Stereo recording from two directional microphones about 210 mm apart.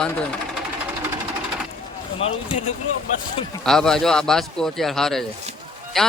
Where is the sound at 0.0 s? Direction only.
5° left (ahead or behind).